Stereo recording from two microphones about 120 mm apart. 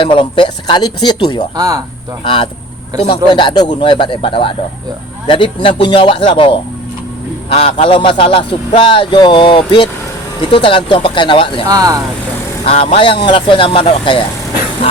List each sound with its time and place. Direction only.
0.0 s speech: 45° left (ahead or behind)
1.5 s speech: 30° right (ahead or behind)
2.2 s speech: 45° left (ahead or behind)
11.7 s speech: 30° right (ahead or behind)
12.6 s speech: 50° left (ahead or behind)